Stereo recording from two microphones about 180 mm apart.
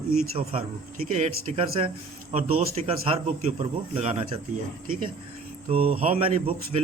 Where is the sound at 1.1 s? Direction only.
35° right (ahead or behind).